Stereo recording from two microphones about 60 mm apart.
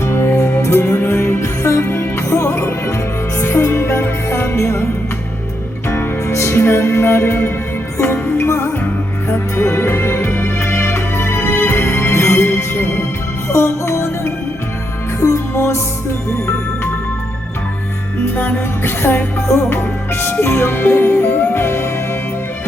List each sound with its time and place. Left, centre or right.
0.0 s music: left
6.0 s music: left
15.2 s music: left
18.3 s music: left